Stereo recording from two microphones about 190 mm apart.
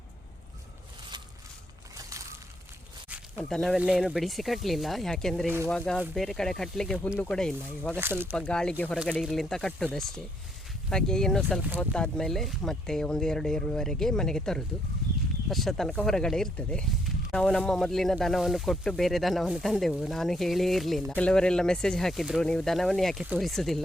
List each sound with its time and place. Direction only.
2.0 s a sound: 15° right (ahead or behind)
3.5 s speech: centre (ahead or behind)
7.9 s speech: 10° right (ahead or behind)
8.4 s speech: 5° left (ahead or behind)